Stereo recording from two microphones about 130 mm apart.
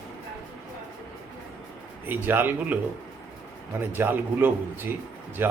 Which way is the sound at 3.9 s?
15° right (ahead or behind).